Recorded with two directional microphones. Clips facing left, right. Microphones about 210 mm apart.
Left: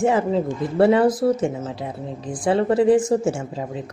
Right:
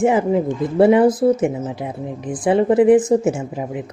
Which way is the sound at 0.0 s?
20° right (ahead or behind).